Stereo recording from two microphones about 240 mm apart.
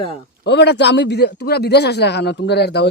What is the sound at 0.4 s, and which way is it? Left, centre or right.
A man's voice, left.